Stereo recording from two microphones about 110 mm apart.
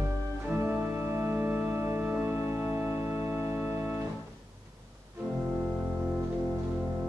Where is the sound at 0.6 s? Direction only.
20° right (ahead or behind).